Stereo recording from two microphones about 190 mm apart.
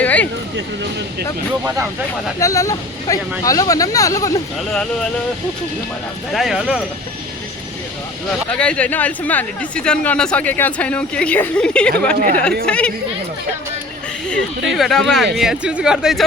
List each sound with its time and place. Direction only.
0.0 s a sound: 10° left (ahead or behind)
2.4 s speech: 15° left (ahead or behind)
4.7 s speech: 5° left (ahead or behind)
6.3 s speech: centre (ahead or behind)
8.4 s speech: 5° left (ahead or behind)
12.1 s speech: 45° right (ahead or behind)
12.6 s speech: 5° left (ahead or behind)
14.7 s speech: centre (ahead or behind)